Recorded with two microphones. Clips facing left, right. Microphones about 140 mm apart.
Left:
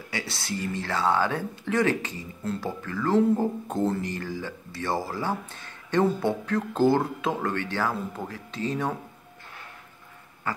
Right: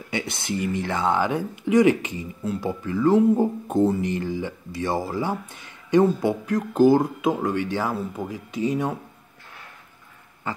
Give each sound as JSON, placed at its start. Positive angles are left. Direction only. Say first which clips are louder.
{"t": 0.1, "sound": "speech", "louder": "right 5 dB", "side_deg": -20}
{"t": 10.4, "sound": "pig", "louder": "right 1 dB", "side_deg": -20}